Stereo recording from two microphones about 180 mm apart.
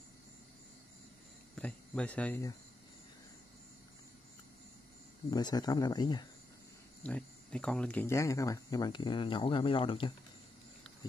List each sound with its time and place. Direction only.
1.5 s speech: 5° left (ahead or behind)
5.3 s speech: 20° left (ahead or behind)
7.0 s speech: 5° left (ahead or behind); by 10.1 s 30° left (ahead or behind)